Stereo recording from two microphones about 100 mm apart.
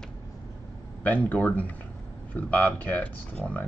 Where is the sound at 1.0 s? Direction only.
15° left (ahead or behind).